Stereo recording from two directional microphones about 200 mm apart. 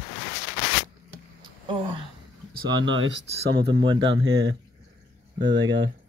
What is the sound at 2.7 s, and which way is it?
Speech, 75° right (ahead or behind).